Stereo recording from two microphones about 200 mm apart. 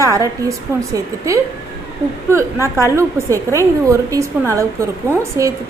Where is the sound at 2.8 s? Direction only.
15° right (ahead or behind).